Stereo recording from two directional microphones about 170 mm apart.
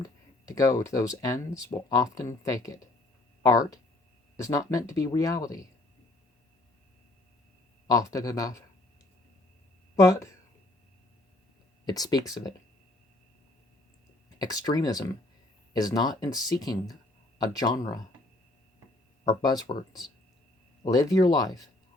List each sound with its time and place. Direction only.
0.0 s speech: 20° left (ahead or behind)
7.9 s speech: 20° left (ahead or behind)
9.9 s speech: 20° left (ahead or behind)
11.9 s speech: 25° left (ahead or behind)
14.3 s speech: 20° left (ahead or behind)
19.3 s speech: 25° left (ahead or behind)